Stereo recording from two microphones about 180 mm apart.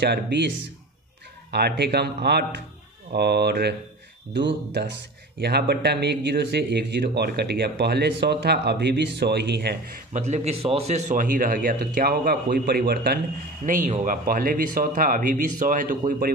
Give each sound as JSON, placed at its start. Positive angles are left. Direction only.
{"t": 0.0, "sound": "speech", "side_deg": -70}
{"t": 1.5, "sound": "speech", "side_deg": -65}
{"t": 4.4, "sound": "speech", "side_deg": -75}
{"t": 5.4, "sound": "speech", "side_deg": -65}
{"t": 10.1, "sound": "speech", "side_deg": -40}
{"t": 13.7, "sound": "speech", "side_deg": -45}